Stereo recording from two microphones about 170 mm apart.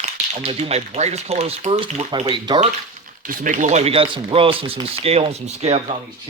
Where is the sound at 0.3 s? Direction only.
35° right (ahead or behind).